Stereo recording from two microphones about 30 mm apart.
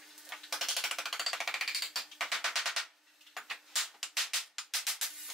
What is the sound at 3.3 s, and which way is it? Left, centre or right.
Music, centre.